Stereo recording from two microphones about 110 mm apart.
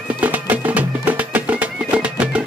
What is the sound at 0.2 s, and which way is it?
Music, 15° right (ahead or behind).